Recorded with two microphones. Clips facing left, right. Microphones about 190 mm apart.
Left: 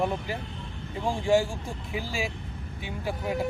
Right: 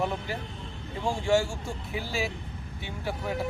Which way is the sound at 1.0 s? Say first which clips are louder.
Left 1 dB; 15° left (ahead or behind).